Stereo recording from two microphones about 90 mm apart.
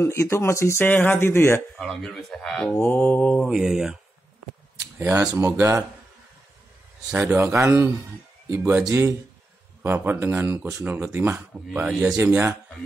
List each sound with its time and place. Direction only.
0.0 s speech: 30° left (ahead or behind)
1.8 s speech: 5° left (ahead or behind)
2.8 s speech: 20° left (ahead or behind)
3.4 s speech: 5° right (ahead or behind)
4.9 s speech: 25° right (ahead or behind)
5.4 s speech: 35° right (ahead or behind)
7.2 s speech: 30° right (ahead or behind)
8.5 s speech: 20° right (ahead or behind)
8.8 s speech: 35° right (ahead or behind)
11.3 s speech: 15° right (ahead or behind)
12.2 s speech: 35° right (ahead or behind)